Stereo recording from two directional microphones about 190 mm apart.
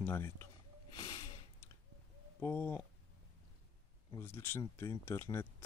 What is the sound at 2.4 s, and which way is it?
Speech, 10° left (ahead or behind).